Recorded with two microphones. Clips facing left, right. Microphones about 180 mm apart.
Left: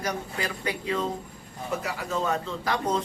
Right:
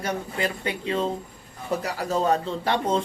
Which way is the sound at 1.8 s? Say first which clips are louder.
Right 5 dB; 40° right (ahead or behind).